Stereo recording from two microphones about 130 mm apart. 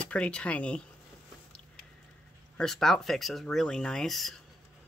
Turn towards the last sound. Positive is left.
turn(degrees=0)  # may be behind; listen again after turning